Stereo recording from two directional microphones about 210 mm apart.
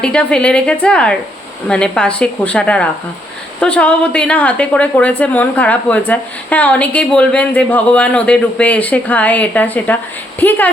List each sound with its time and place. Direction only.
0.0 s a woman's voice: 5° left (ahead or behind)